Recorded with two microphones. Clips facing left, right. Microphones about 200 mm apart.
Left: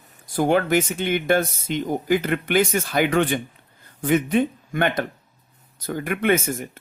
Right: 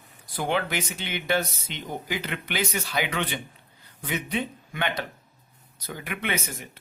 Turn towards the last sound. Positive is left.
turn(degrees=45)  # may be behind; listen again after turning